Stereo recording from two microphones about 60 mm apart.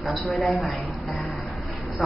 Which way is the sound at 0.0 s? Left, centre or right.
Centre.